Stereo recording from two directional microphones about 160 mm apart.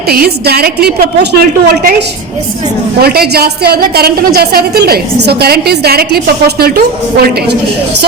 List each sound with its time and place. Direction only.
0.1 s a woman's voice: 75° right (ahead or behind)
3.0 s a woman's voice: 70° right (ahead or behind)